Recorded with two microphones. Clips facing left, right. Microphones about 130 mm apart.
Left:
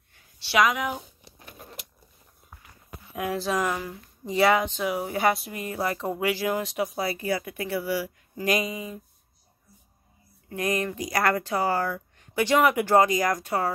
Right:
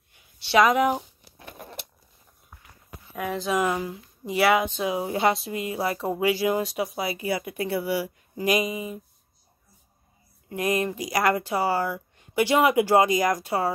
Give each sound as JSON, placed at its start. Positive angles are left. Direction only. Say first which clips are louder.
{"t": 0.6, "sound": "speech", "louder": "right 4 dB", "side_deg": -35}
{"t": 1.4, "sound": "a sound", "louder": "right 4 dB", "side_deg": -65}
{"t": 3.1, "sound": "speech", "louder": "even", "side_deg": 5}
{"t": 3.5, "sound": "speech", "louder": "right 3 dB", "side_deg": -15}
{"t": 10.6, "sound": "speech", "louder": "right 2 dB", "side_deg": -20}